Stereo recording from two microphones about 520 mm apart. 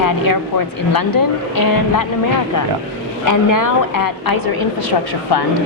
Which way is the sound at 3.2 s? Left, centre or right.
Left.